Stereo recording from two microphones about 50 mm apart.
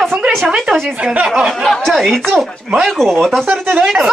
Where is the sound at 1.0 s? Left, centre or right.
Right.